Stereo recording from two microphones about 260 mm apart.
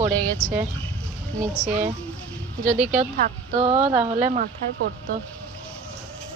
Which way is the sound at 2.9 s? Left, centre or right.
Right.